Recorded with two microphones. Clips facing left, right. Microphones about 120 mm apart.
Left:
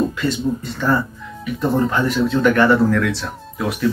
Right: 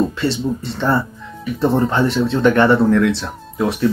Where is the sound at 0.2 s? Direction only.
30° right (ahead or behind).